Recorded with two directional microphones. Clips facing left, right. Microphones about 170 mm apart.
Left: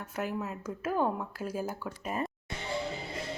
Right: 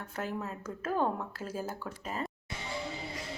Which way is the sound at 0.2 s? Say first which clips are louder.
Left 2 dB; 10° left (ahead or behind).